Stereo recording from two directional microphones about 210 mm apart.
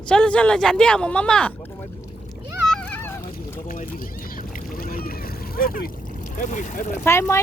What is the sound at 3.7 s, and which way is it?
Boat, 40° left (ahead or behind).